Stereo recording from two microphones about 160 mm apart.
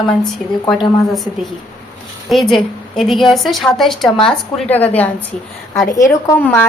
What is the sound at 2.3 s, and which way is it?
A woman's voice, centre (ahead or behind).